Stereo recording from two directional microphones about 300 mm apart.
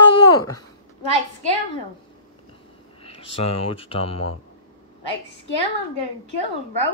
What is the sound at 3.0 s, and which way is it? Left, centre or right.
Speech, centre.